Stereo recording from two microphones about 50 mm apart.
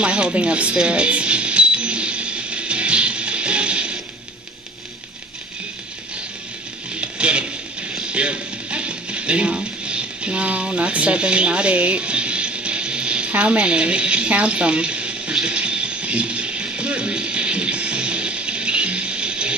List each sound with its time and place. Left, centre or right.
0.0 s music: right
7.0 s music: right